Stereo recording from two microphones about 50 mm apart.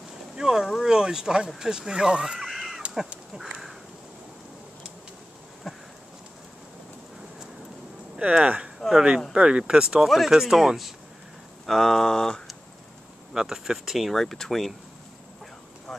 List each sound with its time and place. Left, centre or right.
0.4 s speech: centre
2.3 s a sound: centre
8.4 s speech: right
10.0 s speech: centre
11.6 s a sound: centre
13.3 s speech: centre
15.9 s vehicle: centre